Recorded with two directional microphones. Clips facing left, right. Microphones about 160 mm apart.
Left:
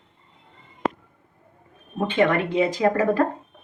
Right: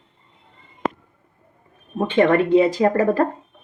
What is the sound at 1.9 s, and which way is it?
Speech, 30° right (ahead or behind).